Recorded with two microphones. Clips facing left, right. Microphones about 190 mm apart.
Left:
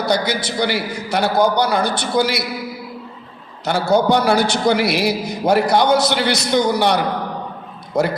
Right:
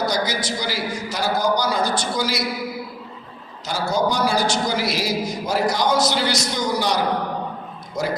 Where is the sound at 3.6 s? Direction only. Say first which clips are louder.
Left 6 dB; 65° left (ahead or behind).